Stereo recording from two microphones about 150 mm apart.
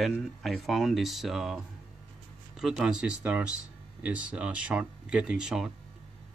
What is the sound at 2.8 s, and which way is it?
Speech, 5° right (ahead or behind).